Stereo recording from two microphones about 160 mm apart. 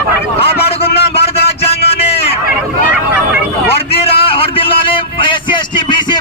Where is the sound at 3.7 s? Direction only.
35° left (ahead or behind).